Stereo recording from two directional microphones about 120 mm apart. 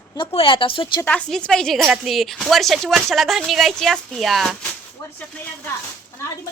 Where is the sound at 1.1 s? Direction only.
10° left (ahead or behind).